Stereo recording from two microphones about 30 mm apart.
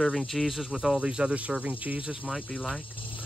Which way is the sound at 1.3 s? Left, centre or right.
Right.